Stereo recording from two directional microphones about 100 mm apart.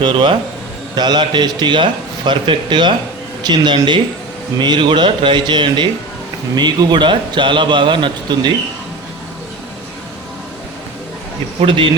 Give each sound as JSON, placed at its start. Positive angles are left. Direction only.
{"t": 0.0, "sound": "speech", "side_deg": -50}
{"t": 11.6, "sound": "speech", "side_deg": -60}